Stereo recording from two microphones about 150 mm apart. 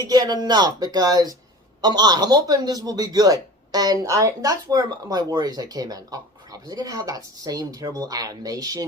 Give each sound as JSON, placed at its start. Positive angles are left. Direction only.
{"t": 0.0, "sound": "a man's voice", "side_deg": -25}